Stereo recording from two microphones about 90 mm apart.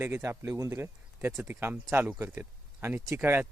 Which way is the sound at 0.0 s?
30° right (ahead or behind).